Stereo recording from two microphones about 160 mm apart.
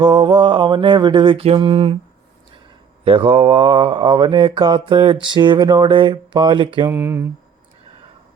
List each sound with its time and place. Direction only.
0.0 s mantra: 30° right (ahead or behind)
3.0 s mantra: 35° right (ahead or behind)
6.9 s speech: 15° right (ahead or behind)